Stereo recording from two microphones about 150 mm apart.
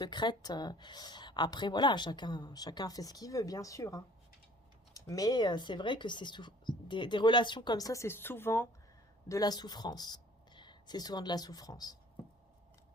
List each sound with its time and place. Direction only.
0.0 s a woman's voice: 30° left (ahead or behind)
9.3 s speech: 25° left (ahead or behind)